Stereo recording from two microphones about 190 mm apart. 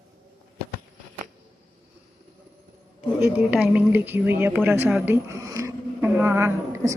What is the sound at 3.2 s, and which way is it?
Speech, 10° right (ahead or behind).